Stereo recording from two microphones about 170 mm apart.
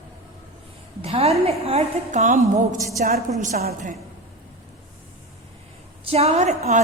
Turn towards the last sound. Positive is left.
turn(degrees=-40)  # may be behind; listen again after turning